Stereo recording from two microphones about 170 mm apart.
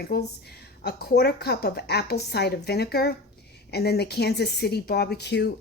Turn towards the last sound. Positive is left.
turn(degrees=80)